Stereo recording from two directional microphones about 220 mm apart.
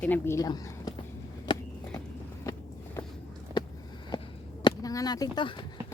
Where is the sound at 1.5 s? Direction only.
20° left (ahead or behind).